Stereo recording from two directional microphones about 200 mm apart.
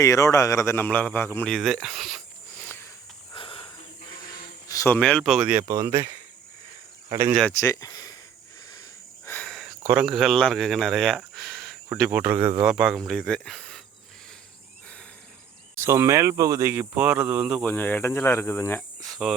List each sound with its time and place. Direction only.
0.0 s speech: 15° left (ahead or behind)
3.3 s a sound: 25° left (ahead or behind)
4.7 s cricket: 15° left (ahead or behind)
4.9 s speech: 5° left (ahead or behind); by 6.1 s 15° right (ahead or behind)
7.1 s speech: 15° right (ahead or behind)
7.6 s speech: 15° left (ahead or behind)
9.2 s speech: 5° left (ahead or behind); by 12.8 s 15° right (ahead or behind)
12.8 s speech: centre (ahead or behind)
15.7 s speech: 15° right (ahead or behind)
17.7 s speech: 10° left (ahead or behind)